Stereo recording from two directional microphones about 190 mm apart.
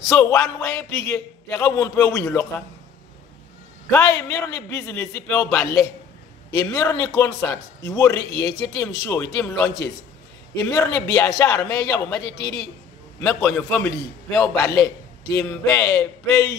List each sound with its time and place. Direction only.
0.1 s a man's voice: 15° left (ahead or behind)
3.9 s a man's voice: 15° left (ahead or behind)
15.7 s a man's voice: 15° left (ahead or behind)